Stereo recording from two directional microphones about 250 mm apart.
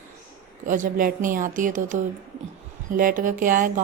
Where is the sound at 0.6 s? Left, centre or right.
Right.